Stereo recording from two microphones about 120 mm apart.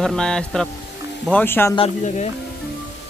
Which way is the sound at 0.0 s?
5° left (ahead or behind).